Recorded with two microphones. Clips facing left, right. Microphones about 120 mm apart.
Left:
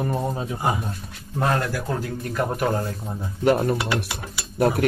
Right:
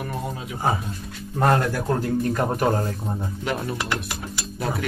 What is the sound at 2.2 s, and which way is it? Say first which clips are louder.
Speech: right 2 dB; 40° right (ahead or behind).